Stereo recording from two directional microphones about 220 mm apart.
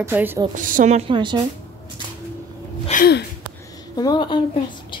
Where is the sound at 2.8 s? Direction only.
35° left (ahead or behind).